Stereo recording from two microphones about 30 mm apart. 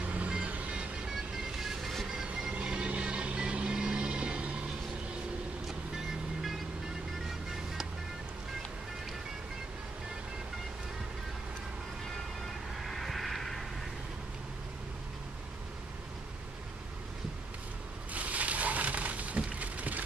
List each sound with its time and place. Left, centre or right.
0.0 s music: right
1.8 s music: centre
2.6 s vehicle: right
5.7 s vehicle: centre
12.8 s vehicle: centre
18.1 s a sound: right